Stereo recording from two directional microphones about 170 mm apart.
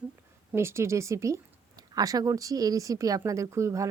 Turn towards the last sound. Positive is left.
turn(degrees=-15)  # may be behind; listen again after turning